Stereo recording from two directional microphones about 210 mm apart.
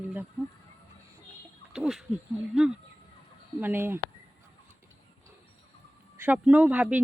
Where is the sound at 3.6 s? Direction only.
10° right (ahead or behind).